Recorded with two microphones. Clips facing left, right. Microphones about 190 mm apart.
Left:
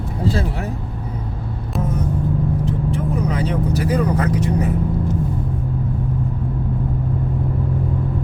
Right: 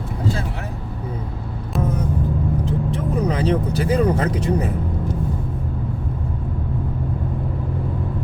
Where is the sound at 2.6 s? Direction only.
35° right (ahead or behind).